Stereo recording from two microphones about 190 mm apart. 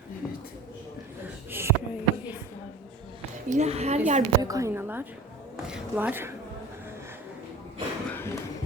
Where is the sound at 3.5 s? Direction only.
35° right (ahead or behind).